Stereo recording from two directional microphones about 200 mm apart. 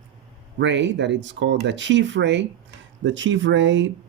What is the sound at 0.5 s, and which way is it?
Speech, 60° right (ahead or behind).